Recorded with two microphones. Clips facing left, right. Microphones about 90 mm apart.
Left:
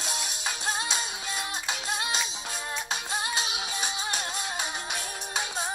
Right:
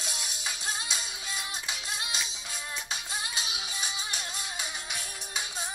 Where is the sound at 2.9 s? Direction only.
55° left (ahead or behind).